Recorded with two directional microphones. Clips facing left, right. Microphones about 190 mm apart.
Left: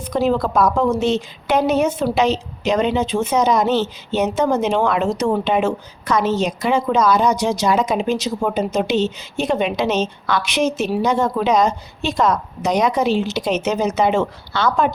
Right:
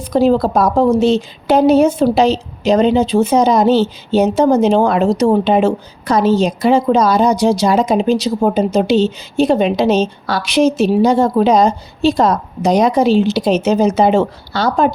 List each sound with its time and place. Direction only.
0.0 s a woman's voice: 35° right (ahead or behind)